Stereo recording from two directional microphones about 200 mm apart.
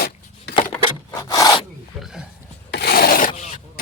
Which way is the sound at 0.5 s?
60° left (ahead or behind).